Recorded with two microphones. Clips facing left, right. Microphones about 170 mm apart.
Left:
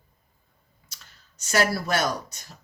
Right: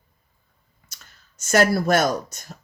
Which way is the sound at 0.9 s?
45° right (ahead or behind).